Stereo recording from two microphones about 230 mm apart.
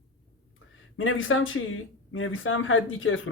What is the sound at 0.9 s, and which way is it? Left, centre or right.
Speech, left.